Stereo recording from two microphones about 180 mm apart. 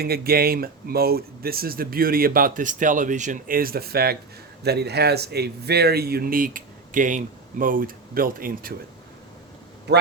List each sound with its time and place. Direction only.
0.0 s speech: 60° right (ahead or behind)
9.9 s speech: 70° right (ahead or behind)